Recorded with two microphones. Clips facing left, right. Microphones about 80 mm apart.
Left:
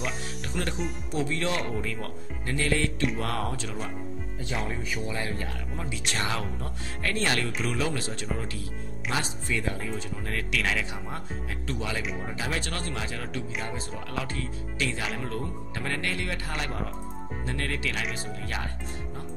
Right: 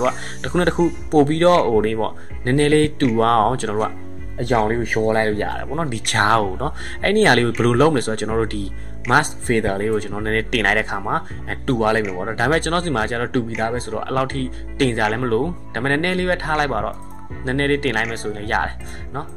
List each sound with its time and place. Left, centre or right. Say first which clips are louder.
0.0 s speech: right 12 dB; right